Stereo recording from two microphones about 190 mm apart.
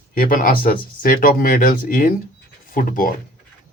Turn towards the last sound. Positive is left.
turn(degrees=45)  # may be behind; listen again after turning